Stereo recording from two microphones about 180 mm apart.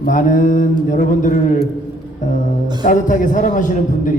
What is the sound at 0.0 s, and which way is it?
A man's voice, 45° left (ahead or behind).